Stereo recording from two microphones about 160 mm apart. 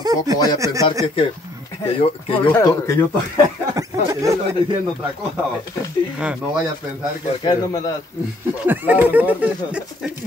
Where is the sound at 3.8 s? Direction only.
20° right (ahead or behind).